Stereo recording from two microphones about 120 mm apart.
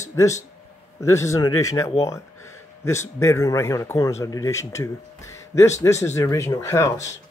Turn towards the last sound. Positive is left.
turn(degrees=25)  # may be behind; listen again after turning